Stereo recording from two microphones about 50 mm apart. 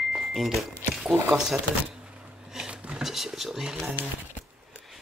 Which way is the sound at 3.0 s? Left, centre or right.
Centre.